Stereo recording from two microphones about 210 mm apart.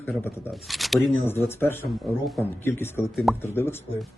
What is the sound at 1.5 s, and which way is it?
Speech, 10° left (ahead or behind).